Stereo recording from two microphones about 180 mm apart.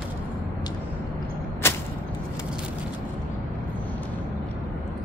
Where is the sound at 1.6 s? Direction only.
15° left (ahead or behind).